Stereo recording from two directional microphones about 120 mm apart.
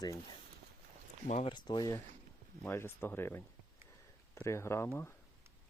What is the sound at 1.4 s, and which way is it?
Speech, 40° left (ahead or behind).